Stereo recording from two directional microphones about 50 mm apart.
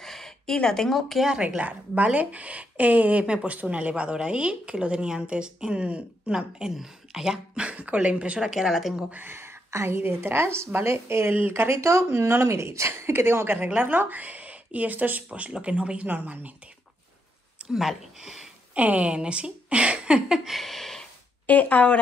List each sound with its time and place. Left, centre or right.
0.0 s speech: centre
1.2 s speech: centre
1.6 s a woman's voice: right
6.3 s speech: centre
7.6 s a woman's voice: right; by 8.9 s centre
9.2 s a woman's voice: right
11.8 s speech: right
12.1 s a woman's voice: right
13.7 s a woman's voice: right
16.1 s speech: right
17.7 s speech: centre
18.8 s a woman's voice: right
20.4 s a sound: centre
21.5 s speech: left